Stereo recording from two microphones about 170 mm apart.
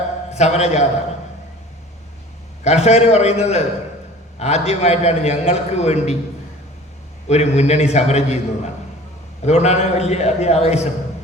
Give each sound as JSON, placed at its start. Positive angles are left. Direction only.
{"t": 0.3, "sound": "a man's voice", "side_deg": 40}
{"t": 2.6, "sound": "a man's voice", "side_deg": 40}
{"t": 7.3, "sound": "a man's voice", "side_deg": 40}